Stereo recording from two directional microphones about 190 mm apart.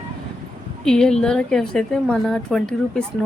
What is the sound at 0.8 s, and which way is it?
A woman's voice, 5° left (ahead or behind).